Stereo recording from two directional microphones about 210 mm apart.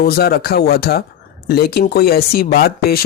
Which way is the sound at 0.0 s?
45° left (ahead or behind).